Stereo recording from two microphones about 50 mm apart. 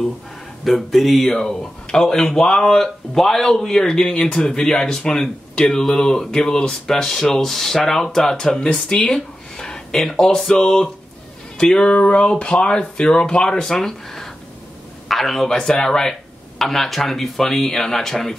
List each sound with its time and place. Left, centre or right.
0.7 s speech: centre
8.5 s speech: left